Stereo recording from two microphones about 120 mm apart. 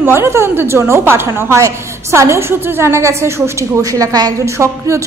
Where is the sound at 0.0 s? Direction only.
20° right (ahead or behind).